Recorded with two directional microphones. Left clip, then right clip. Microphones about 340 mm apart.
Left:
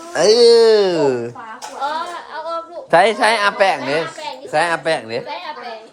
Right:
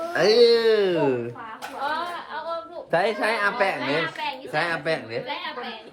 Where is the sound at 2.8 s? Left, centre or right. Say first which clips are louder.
Left 10 dB; centre.